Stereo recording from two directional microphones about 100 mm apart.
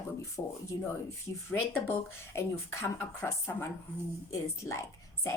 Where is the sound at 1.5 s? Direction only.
20° left (ahead or behind).